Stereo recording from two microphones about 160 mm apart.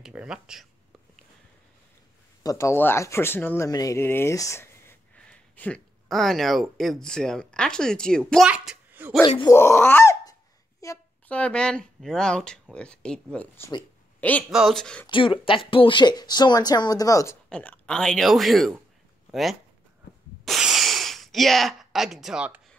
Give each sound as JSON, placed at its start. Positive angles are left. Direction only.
{"t": 0.0, "sound": "speech", "side_deg": -5}
{"t": 2.4, "sound": "speech", "side_deg": 20}
{"t": 8.5, "sound": "a sound", "side_deg": -10}
{"t": 9.4, "sound": "a woman's voice", "side_deg": 15}
{"t": 11.2, "sound": "speech", "side_deg": 10}
{"t": 15.0, "sound": "speech", "side_deg": 30}
{"t": 17.5, "sound": "speech", "side_deg": 5}
{"t": 20.4, "sound": "a sound", "side_deg": 0}